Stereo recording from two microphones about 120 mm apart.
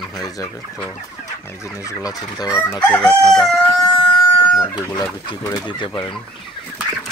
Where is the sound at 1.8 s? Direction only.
25° left (ahead or behind).